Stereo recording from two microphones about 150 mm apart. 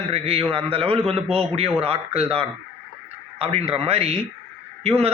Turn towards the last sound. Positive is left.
turn(degrees=-40)  # may be behind; listen again after turning